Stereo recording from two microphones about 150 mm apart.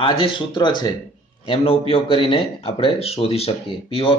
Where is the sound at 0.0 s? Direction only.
35° left (ahead or behind).